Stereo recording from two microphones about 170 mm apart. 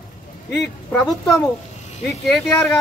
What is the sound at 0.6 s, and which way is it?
Speech, 15° left (ahead or behind).